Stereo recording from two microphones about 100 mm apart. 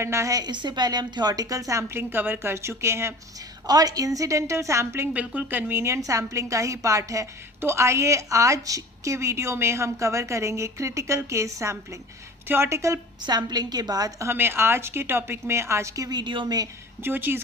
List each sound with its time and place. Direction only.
0.0 s a woman's voice: 30° right (ahead or behind)
3.7 s a woman's voice: 40° right (ahead or behind)
5.1 s a woman's voice: 15° right (ahead or behind); by 13.0 s 30° right (ahead or behind)
13.2 s a woman's voice: 45° right (ahead or behind)
14.3 s a woman's voice: 25° right (ahead or behind); by 16.6 s 50° right (ahead or behind)
17.0 s a woman's voice: 20° right (ahead or behind)